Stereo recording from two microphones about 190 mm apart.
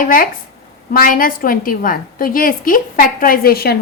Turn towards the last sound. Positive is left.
turn(degrees=55)  # may be behind; listen again after turning